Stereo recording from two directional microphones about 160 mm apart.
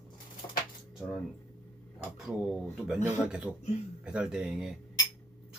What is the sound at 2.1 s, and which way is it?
Speech, centre (ahead or behind).